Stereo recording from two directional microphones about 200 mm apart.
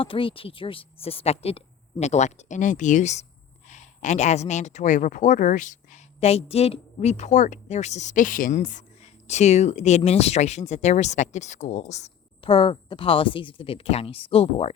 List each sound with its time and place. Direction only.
0.0 s speech: 25° left (ahead or behind)